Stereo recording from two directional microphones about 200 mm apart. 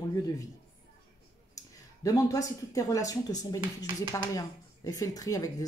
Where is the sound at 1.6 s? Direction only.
15° left (ahead or behind).